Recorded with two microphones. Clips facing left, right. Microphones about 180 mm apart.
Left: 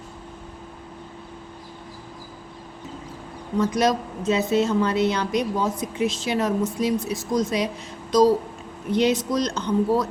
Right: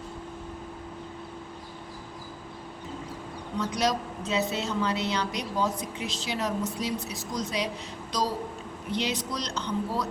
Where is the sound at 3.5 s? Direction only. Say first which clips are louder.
Left 7 dB; 50° left (ahead or behind).